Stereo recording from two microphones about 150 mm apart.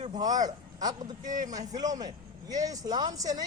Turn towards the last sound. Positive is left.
turn(degrees=-25)  # may be behind; listen again after turning